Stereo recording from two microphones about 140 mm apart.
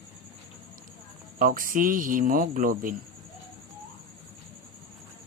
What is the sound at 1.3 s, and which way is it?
A man's voice, 75° right (ahead or behind).